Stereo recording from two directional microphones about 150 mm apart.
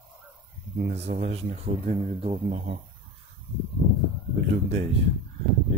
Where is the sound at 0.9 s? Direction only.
45° right (ahead or behind).